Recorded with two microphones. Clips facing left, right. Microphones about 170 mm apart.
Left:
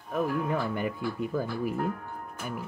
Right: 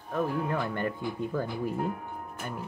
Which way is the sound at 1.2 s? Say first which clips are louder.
Left 1 dB; 10° left (ahead or behind).